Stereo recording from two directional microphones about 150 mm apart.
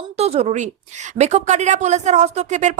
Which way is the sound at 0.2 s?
45° right (ahead or behind).